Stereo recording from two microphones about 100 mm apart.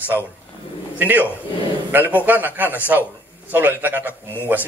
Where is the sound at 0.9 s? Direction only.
15° right (ahead or behind).